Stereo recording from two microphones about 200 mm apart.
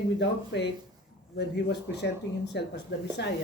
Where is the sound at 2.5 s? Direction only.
60° left (ahead or behind).